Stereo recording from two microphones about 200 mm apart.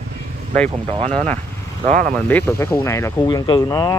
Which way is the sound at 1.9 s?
40° right (ahead or behind).